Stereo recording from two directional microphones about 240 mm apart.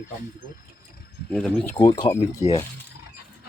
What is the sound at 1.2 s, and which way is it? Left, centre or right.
Speech, centre.